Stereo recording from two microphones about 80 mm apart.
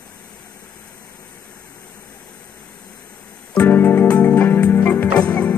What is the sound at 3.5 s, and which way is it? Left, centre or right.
Music, left.